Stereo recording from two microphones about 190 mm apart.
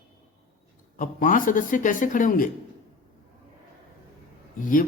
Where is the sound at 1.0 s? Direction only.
45° left (ahead or behind).